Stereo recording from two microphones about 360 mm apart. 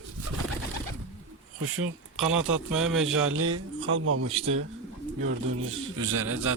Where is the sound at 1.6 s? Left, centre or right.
Right.